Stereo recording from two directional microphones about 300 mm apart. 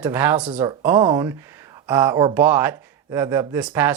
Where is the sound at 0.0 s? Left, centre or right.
Centre.